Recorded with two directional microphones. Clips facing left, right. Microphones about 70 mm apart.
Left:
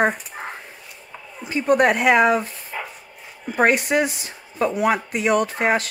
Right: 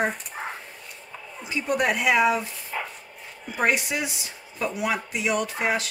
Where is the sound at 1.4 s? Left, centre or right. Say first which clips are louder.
Left 7 dB; left.